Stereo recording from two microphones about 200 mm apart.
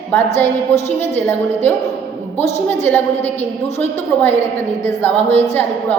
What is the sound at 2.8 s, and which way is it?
Speech, 10° left (ahead or behind).